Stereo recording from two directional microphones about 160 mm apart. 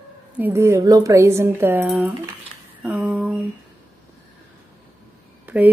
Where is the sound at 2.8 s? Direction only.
5° right (ahead or behind).